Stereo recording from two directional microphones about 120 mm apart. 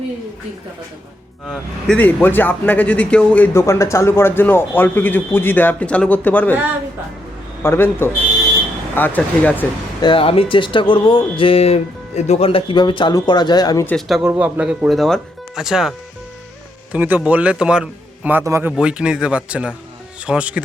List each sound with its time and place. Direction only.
2.0 s a man's voice: 15° left (ahead or behind)
7.6 s a man's voice: 20° left (ahead or behind)
10.0 s speech: 45° left (ahead or behind)
13.9 s a man's voice: centre (ahead or behind); by 18.7 s 25° right (ahead or behind)
18.8 s a man's voice: 10° right (ahead or behind)